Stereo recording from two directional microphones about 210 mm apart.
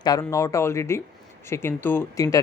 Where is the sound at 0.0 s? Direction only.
15° left (ahead or behind).